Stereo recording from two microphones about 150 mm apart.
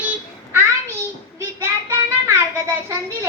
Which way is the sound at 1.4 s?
15° right (ahead or behind).